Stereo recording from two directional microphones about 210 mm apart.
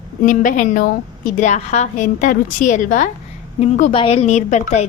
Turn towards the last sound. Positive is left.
turn(degrees=35)  # may be behind; listen again after turning